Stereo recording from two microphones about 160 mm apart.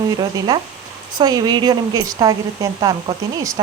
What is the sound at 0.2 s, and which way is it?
Speech, 25° right (ahead or behind).